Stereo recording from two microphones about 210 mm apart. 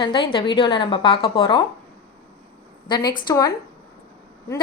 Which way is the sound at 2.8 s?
20° left (ahead or behind).